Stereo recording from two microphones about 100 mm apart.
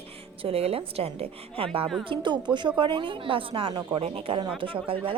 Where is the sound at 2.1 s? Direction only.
50° right (ahead or behind).